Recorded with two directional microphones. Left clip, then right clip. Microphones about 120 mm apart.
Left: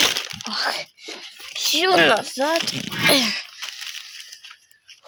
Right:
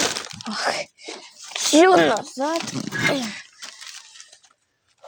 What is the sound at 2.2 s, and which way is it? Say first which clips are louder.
Speech: left 3 dB; 25° left (ahead or behind).